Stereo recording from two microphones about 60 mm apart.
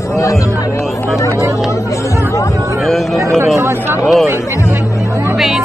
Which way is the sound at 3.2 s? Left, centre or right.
Right.